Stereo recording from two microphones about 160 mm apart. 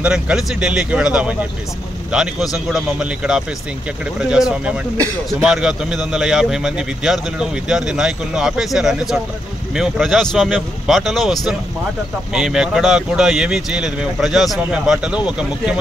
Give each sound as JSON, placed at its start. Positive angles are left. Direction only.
{"t": 0.0, "sound": "a man's voice", "side_deg": -5}